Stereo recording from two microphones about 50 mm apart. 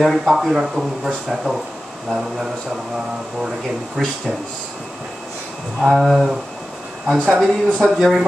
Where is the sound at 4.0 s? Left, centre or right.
Centre.